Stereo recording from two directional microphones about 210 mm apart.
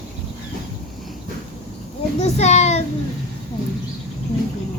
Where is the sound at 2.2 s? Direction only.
30° left (ahead or behind).